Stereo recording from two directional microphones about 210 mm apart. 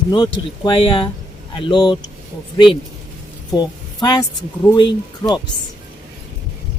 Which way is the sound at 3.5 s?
20° left (ahead or behind).